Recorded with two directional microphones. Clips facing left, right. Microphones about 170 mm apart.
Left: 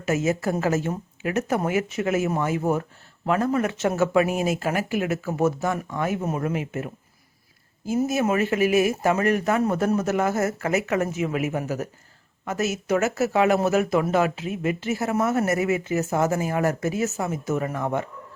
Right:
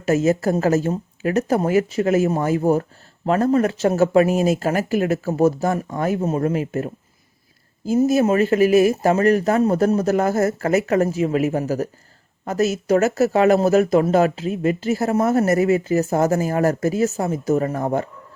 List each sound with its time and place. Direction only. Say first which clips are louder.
0.0 s speech: right 6 dB; 35° right (ahead or behind)